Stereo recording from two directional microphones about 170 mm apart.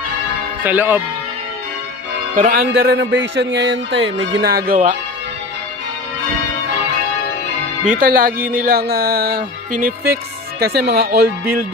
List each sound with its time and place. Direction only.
0.7 s speech: 10° right (ahead or behind)
2.3 s music: 60° right (ahead or behind); by 4.3 s 90° right
4.4 s speech: 65° right (ahead or behind)
7.9 s music: 55° right (ahead or behind)
10.8 s speech: 75° right (ahead or behind)